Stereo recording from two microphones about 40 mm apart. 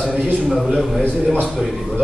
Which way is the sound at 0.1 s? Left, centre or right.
Right.